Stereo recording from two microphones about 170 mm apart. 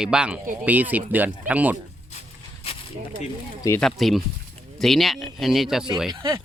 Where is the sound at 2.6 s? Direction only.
35° left (ahead or behind).